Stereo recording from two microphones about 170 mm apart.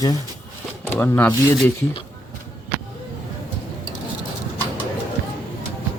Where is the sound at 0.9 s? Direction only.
10° left (ahead or behind).